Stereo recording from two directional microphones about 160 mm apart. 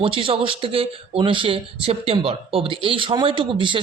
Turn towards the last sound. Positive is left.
turn(degrees=-30)  # may be behind; listen again after turning